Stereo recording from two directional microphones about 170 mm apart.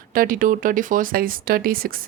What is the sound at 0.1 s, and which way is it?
A woman's voice, 55° right (ahead or behind).